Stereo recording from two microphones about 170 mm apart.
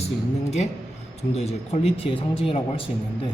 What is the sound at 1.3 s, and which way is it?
Speech, 40° left (ahead or behind).